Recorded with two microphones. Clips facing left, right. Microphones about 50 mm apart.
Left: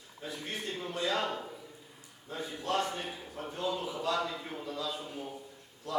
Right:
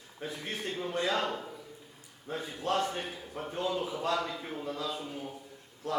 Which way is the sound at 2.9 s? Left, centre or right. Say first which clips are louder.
Right 2 dB; right.